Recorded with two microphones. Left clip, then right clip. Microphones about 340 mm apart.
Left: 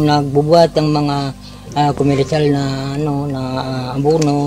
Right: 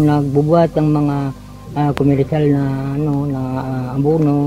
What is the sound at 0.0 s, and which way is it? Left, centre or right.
Speech, left.